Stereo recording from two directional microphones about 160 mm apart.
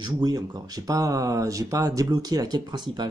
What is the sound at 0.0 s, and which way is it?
Speech, 25° right (ahead or behind).